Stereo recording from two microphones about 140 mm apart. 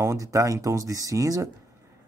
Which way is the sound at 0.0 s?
20° right (ahead or behind).